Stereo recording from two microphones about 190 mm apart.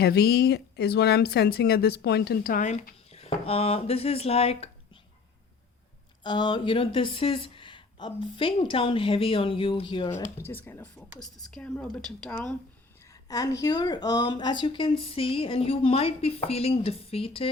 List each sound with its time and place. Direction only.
0.0 s speech: 55° left (ahead or behind); by 4.7 s 30° left (ahead or behind)
6.2 s speech: 25° left (ahead or behind)
10.3 s speech: 10° left (ahead or behind)
13.2 s speech: 20° left (ahead or behind)